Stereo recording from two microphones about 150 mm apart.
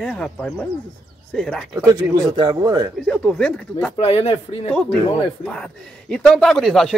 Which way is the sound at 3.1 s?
5° left (ahead or behind).